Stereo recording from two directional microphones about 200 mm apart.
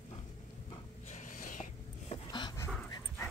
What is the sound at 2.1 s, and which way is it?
Dog, 20° left (ahead or behind).